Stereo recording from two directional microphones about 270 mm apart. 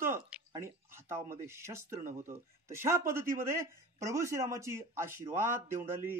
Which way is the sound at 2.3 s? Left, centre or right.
Centre.